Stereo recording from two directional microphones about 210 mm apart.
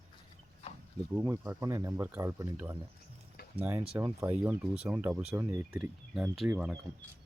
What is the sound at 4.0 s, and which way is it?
Speech, 15° right (ahead or behind).